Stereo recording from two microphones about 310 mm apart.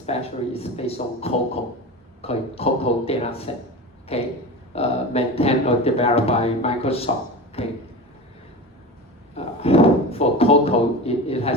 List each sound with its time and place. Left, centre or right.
0.0 s speech: centre
9.3 s speech: centre